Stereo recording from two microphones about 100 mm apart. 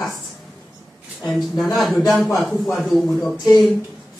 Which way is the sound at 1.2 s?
Centre (ahead or behind).